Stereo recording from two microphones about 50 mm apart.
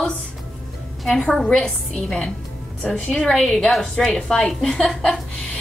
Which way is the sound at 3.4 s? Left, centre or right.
Centre.